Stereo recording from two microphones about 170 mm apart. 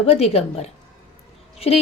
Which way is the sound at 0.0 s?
35° left (ahead or behind).